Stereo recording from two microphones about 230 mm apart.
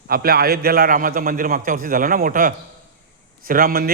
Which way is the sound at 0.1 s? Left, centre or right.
Right.